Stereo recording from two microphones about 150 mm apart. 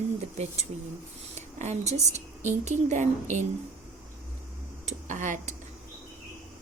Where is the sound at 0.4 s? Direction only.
50° right (ahead or behind).